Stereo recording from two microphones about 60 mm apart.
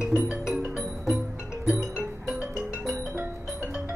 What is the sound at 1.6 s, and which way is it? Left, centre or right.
Music, centre.